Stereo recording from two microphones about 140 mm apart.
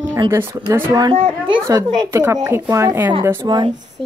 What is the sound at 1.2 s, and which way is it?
Speech, 40° right (ahead or behind).